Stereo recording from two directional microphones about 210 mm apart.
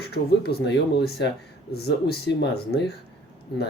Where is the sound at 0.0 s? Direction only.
50° left (ahead or behind).